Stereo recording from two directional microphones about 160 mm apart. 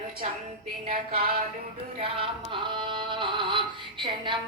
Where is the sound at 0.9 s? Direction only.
65° right (ahead or behind).